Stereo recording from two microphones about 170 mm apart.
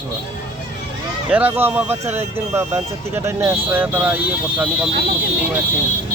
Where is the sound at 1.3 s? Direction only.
10° right (ahead or behind).